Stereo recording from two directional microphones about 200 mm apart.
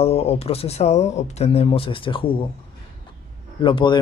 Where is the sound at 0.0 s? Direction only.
30° left (ahead or behind).